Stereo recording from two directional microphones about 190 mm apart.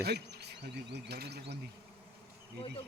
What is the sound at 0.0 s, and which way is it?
Speech, 60° right (ahead or behind).